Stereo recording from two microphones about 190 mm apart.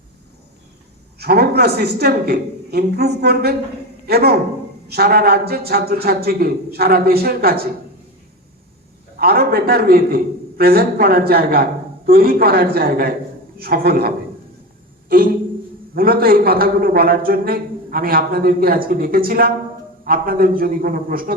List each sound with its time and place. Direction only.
1.2 s a man's voice: 55° right (ahead or behind)
9.1 s a man's voice: 55° right (ahead or behind)
16.0 s a man's voice: 50° right (ahead or behind)